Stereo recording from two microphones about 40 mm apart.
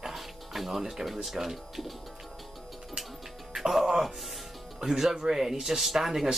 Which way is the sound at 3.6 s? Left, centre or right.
Centre.